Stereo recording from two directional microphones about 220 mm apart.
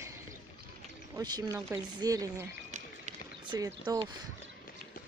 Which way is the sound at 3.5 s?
15° right (ahead or behind).